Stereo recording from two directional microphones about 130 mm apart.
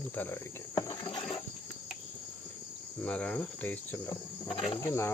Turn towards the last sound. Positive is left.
turn(degrees=20)  # may be behind; listen again after turning